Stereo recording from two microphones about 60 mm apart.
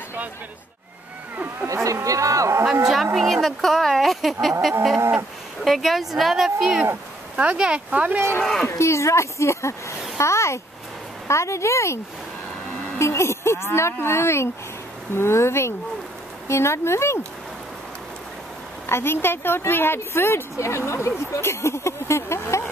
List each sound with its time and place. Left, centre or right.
1.7 s speech: right
3.2 s speech: centre; by 8.2 s right
8.6 s speech: left
10.1 s a sound: left
11.2 s speech: left
13.0 s speech: left
18.9 s speech: left